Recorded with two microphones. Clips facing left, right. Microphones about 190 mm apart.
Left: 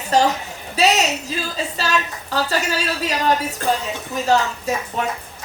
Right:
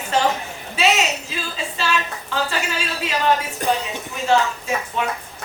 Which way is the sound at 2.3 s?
40° left (ahead or behind).